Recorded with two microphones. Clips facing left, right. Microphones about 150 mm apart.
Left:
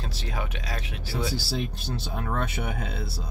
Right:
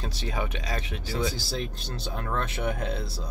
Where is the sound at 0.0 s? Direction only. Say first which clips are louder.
Right 2 dB; centre (ahead or behind).